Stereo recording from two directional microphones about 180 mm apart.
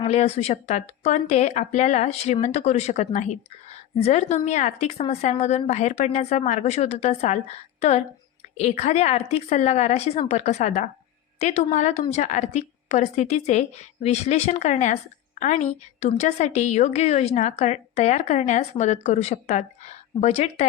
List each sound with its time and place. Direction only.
0.0 s speech: 35° left (ahead or behind)